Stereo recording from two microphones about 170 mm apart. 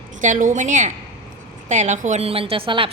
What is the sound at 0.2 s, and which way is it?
A woman's voice, 50° right (ahead or behind).